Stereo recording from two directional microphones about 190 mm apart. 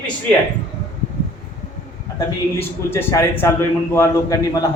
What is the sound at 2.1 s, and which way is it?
A man's voice, 10° left (ahead or behind).